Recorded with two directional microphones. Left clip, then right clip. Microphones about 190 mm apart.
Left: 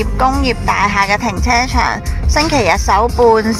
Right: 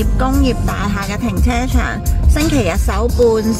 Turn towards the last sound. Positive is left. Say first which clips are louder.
# left 3 dB
turn(degrees=10)  # may be behind; listen again after turning